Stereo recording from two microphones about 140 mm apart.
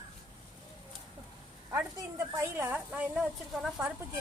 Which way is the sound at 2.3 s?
15° right (ahead or behind).